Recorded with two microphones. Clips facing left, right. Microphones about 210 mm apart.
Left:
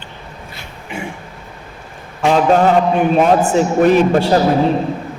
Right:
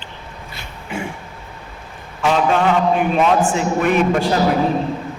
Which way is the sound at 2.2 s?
40° left (ahead or behind).